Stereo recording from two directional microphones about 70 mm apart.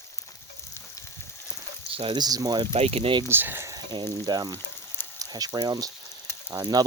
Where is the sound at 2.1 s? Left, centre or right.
Right.